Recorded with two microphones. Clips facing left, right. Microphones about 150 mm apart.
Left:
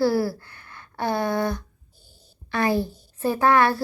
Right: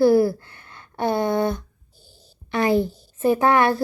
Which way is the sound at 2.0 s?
90° right.